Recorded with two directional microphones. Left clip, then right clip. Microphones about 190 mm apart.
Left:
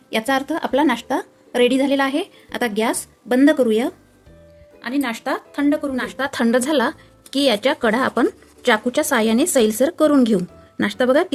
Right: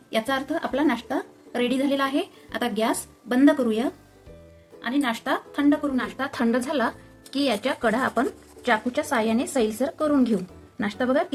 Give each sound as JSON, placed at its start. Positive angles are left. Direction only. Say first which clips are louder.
{"t": 0.1, "sound": "a woman's voice", "louder": "left 5 dB", "side_deg": 40}